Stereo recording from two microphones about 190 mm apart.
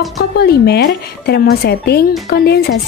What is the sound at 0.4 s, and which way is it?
Speech, 55° left (ahead or behind).